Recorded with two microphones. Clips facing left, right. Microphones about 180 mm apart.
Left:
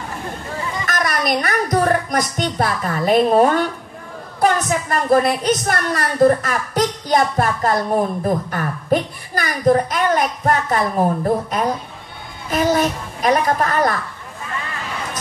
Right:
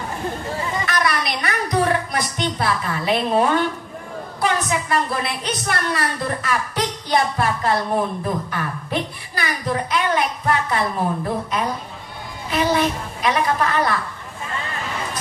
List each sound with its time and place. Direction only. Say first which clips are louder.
0.8 s a woman's voice: left 4 dB; 45° left (ahead or behind)